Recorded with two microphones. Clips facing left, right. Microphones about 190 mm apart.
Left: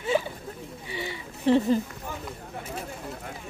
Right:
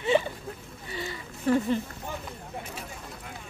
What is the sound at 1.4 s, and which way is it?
Speech, 25° left (ahead or behind).